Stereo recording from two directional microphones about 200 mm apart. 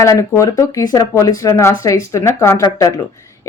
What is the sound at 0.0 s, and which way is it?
Speech, 15° left (ahead or behind).